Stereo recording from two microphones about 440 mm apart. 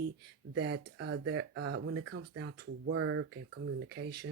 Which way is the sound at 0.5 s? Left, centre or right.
Right.